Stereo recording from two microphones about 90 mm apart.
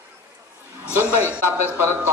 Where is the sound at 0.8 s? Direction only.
20° right (ahead or behind).